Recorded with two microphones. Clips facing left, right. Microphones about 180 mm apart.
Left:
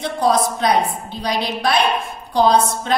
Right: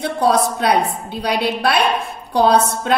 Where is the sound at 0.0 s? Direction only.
60° right (ahead or behind).